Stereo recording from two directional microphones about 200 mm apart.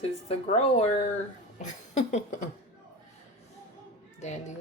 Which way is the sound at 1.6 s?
35° left (ahead or behind).